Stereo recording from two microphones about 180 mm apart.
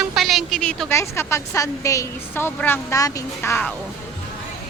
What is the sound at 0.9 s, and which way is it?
A woman's voice, 15° left (ahead or behind).